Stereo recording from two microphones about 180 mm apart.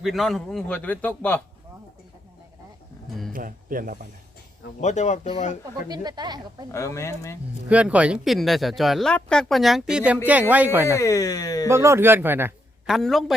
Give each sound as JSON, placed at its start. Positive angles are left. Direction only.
{"t": 0.0, "sound": "speech", "side_deg": 0}
{"t": 3.3, "sound": "speech", "side_deg": -50}
{"t": 4.8, "sound": "speech", "side_deg": 40}
{"t": 5.9, "sound": "speech", "side_deg": -20}
{"t": 6.7, "sound": "speech", "side_deg": 15}
{"t": 7.7, "sound": "speech", "side_deg": -5}
{"t": 10.8, "sound": "speech", "side_deg": 15}
{"t": 11.7, "sound": "a man's voice", "side_deg": -15}
{"t": 12.9, "sound": "speech", "side_deg": 0}